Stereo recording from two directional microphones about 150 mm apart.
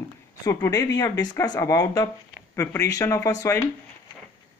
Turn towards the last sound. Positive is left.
turn(degrees=20)  # may be behind; listen again after turning